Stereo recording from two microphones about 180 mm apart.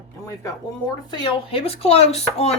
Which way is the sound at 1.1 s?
30° left (ahead or behind).